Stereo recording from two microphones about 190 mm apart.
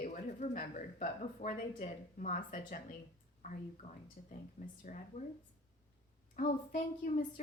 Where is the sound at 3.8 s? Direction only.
40° left (ahead or behind).